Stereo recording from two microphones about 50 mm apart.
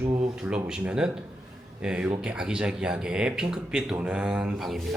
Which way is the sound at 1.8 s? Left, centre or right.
Centre.